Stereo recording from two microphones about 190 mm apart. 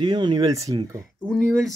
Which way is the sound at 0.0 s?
25° right (ahead or behind).